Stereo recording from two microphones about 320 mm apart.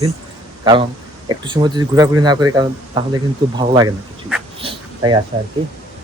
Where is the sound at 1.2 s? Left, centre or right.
Centre.